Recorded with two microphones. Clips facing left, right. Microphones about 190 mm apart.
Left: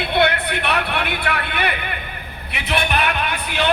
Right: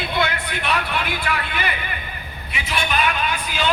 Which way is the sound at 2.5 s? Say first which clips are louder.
Left 3 dB; 65° left (ahead or behind).